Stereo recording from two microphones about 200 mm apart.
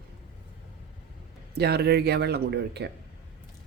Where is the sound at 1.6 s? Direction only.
55° right (ahead or behind).